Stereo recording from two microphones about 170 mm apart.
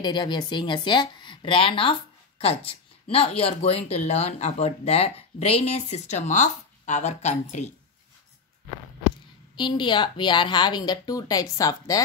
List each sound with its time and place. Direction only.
0.0 s a woman's voice: 25° left (ahead or behind); by 7.7 s 40° left (ahead or behind)
9.6 s a woman's voice: 25° left (ahead or behind)